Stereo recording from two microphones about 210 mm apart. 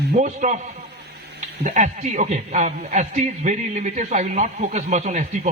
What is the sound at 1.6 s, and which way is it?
A man's voice, 35° right (ahead or behind).